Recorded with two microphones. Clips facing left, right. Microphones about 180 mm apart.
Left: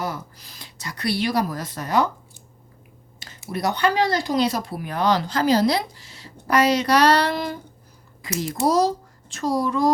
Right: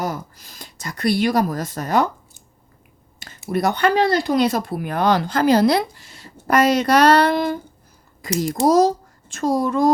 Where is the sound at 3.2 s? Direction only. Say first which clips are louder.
Right 6 dB; 50° right (ahead or behind).